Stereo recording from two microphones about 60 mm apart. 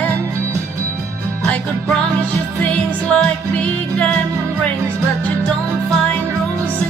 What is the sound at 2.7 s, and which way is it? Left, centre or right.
Music, centre.